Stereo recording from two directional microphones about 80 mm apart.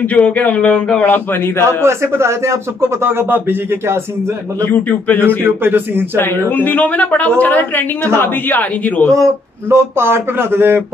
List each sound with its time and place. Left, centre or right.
0.1 s a woman's voice: centre
1.9 s a man's voice: right
4.8 s a woman's voice: centre
5.4 s speech: right
6.1 s a woman's voice: left
9.1 s a man's voice: right